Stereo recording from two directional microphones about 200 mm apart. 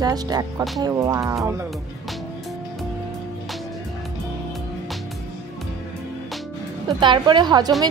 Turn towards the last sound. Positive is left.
turn(degrees=-20)  # may be behind; listen again after turning